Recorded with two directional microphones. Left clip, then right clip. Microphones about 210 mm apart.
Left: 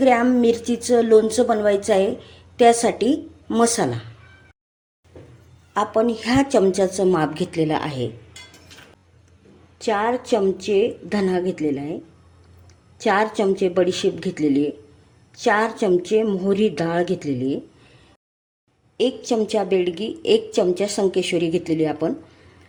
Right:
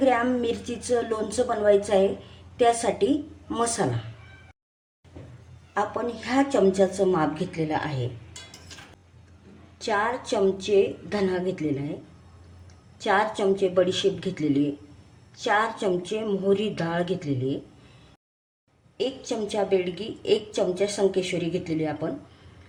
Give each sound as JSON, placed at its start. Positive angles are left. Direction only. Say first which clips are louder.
{"t": 0.0, "sound": "a woman's voice", "louder": "left 6 dB", "side_deg": 40}
{"t": 5.7, "sound": "a woman's voice", "louder": "left 7 dB", "side_deg": 45}
{"t": 9.7, "sound": "a woman's voice", "louder": "left 4 dB", "side_deg": 40}
{"t": 13.0, "sound": "a woman's voice", "louder": "left 4 dB", "side_deg": 40}
{"t": 18.9, "sound": "a woman's voice", "louder": "left 8 dB", "side_deg": 45}